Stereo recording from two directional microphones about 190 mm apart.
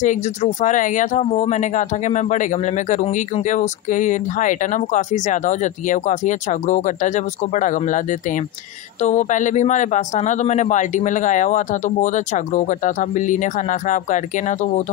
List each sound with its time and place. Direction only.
0.0 s speech: 40° left (ahead or behind)